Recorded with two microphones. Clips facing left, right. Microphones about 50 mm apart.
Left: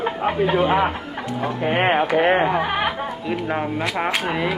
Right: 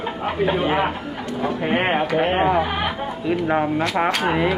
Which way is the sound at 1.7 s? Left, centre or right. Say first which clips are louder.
Left 2 dB; centre.